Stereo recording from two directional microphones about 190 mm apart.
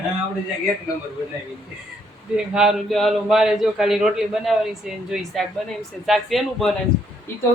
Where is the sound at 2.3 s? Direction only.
5° right (ahead or behind).